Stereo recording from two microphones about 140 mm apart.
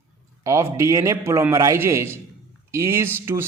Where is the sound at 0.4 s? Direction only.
20° right (ahead or behind).